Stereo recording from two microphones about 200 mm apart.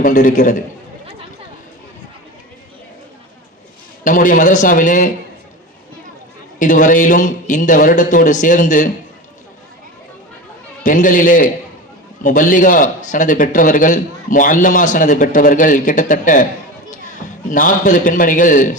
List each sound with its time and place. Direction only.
0.0 s a man's voice: 45° left (ahead or behind)
4.0 s a man's voice: 40° left (ahead or behind)
6.6 s a man's voice: 40° left (ahead or behind)
10.8 s a man's voice: 40° left (ahead or behind)
17.5 s a man's voice: 40° left (ahead or behind)